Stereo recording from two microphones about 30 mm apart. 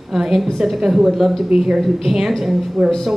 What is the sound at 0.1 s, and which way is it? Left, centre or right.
A woman's voice, centre.